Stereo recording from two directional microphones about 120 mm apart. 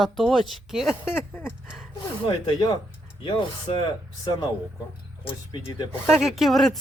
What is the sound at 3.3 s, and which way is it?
Speech, 45° left (ahead or behind).